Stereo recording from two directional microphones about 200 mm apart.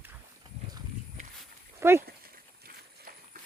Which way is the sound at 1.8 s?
15° right (ahead or behind).